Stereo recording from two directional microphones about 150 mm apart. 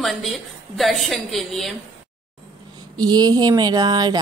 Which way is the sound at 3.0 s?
25° right (ahead or behind).